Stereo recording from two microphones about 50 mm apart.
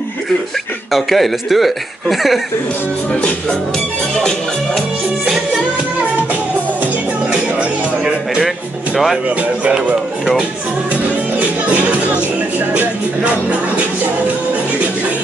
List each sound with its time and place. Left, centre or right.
0.9 s speech: centre
3.1 s music: left
7.2 s music: centre
8.9 s speech: centre
11.3 s music: right
12.5 s speech: right